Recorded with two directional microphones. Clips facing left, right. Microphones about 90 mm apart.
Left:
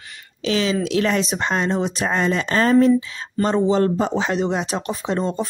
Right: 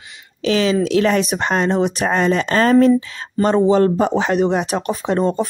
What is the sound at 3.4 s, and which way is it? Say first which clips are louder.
Speech: right 4 dB; 55° right (ahead or behind).